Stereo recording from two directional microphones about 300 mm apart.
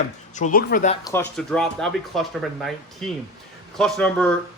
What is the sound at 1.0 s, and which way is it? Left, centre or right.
Speech, centre.